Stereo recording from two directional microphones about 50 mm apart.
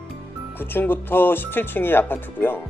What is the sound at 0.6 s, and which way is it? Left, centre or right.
Speech, left.